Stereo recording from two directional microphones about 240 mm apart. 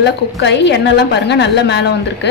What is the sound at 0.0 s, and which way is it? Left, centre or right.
A woman's voice, left.